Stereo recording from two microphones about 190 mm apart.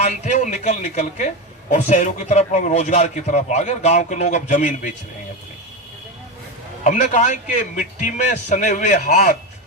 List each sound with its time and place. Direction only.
0.0 s a man's voice: 40° left (ahead or behind)
6.8 s a man's voice: 40° left (ahead or behind)